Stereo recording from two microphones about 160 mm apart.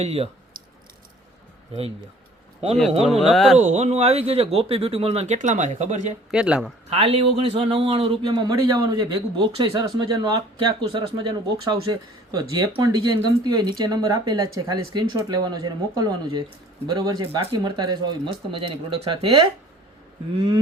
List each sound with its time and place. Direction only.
0.0 s a man's voice: 40° right (ahead or behind)
2.6 s a man's voice: 40° right (ahead or behind)
3.0 s speech: centre (ahead or behind)
3.6 s speech: 45° right (ahead or behind)
6.3 s speech: 5° right (ahead or behind)
6.9 s a man's voice: 35° right (ahead or behind)